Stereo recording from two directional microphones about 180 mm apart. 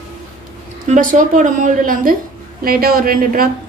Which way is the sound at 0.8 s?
45° right (ahead or behind).